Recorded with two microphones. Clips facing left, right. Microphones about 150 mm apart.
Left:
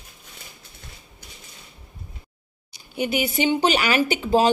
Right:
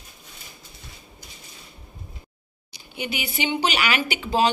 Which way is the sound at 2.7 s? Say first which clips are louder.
Left 7 dB; 45° left (ahead or behind).